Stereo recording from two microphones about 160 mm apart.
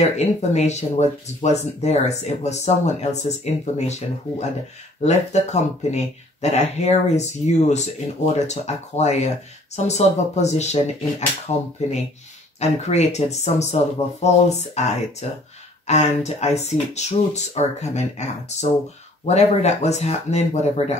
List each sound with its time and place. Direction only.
0.0 s speech: 45° left (ahead or behind)